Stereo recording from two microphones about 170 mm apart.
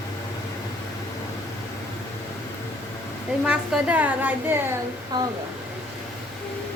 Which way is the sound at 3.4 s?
5° right (ahead or behind).